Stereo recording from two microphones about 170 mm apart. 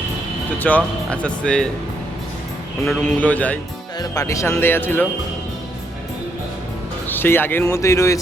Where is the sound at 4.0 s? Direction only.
20° left (ahead or behind).